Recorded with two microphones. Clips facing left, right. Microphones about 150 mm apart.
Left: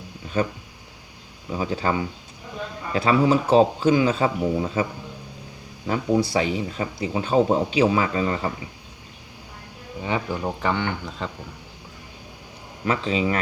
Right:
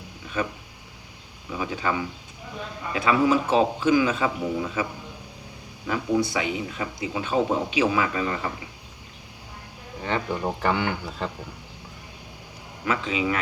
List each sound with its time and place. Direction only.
0.4 s speech: 35° left (ahead or behind)
1.5 s speech: 35° left (ahead or behind)
5.9 s speech: 30° left (ahead or behind)
10.0 s speech: 10° left (ahead or behind)
12.8 s speech: 35° left (ahead or behind)